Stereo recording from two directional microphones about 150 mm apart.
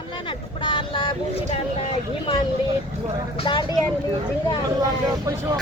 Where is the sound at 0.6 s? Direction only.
30° left (ahead or behind).